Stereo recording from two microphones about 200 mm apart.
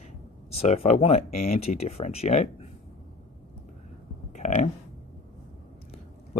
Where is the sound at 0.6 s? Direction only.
35° left (ahead or behind).